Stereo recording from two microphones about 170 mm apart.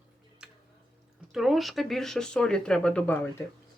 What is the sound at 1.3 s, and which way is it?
Speech, centre (ahead or behind).